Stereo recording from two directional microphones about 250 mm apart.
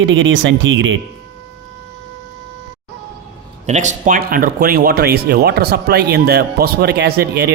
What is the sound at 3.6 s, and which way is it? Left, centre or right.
A man's voice, right.